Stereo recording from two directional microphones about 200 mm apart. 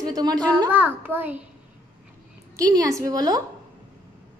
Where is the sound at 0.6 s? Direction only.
10° right (ahead or behind).